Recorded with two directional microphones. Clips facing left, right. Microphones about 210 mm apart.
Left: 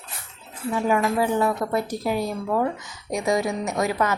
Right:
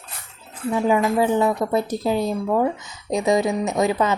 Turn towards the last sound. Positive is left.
turn(degrees=-20)  # may be behind; listen again after turning